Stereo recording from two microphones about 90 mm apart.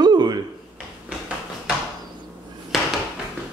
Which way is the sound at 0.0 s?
50° right (ahead or behind).